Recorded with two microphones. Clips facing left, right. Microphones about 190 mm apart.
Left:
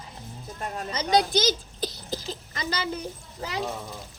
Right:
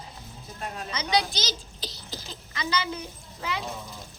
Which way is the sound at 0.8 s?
45° left (ahead or behind).